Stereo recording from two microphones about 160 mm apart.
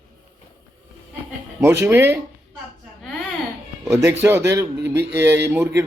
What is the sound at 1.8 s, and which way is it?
Speech, 15° right (ahead or behind).